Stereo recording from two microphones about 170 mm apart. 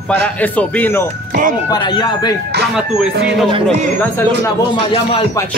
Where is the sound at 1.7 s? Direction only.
25° left (ahead or behind).